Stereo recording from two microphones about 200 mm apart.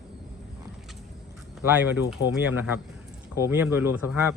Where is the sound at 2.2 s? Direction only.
10° right (ahead or behind).